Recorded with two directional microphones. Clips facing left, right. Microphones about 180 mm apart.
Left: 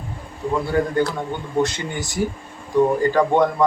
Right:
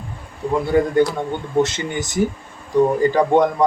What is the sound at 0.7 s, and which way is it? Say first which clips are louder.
A man's voice: right 5 dB; 20° right (ahead or behind).